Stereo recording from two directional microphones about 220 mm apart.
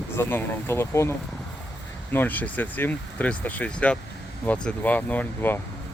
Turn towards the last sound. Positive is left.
turn(degrees=10)  # may be behind; listen again after turning